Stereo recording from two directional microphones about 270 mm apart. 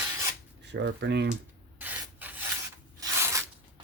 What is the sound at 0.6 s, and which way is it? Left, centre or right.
Speech, right.